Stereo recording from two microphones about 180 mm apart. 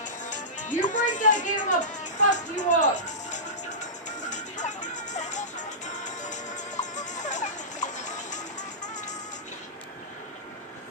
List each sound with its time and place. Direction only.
0.0 s speech: 45° left (ahead or behind)
4.3 s music: 40° left (ahead or behind)